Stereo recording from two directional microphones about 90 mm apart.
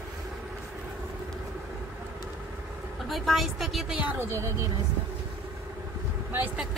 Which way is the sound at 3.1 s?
Centre (ahead or behind).